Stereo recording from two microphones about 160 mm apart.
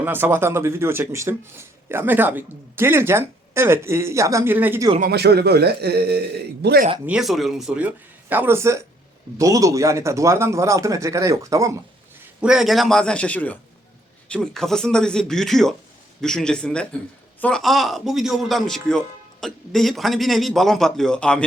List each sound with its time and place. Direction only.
0.0 s speech: 15° right (ahead or behind)
4.9 s a man's voice: 80° right
7.0 s speech: 5° right (ahead or behind)
12.4 s speech: 5° right (ahead or behind)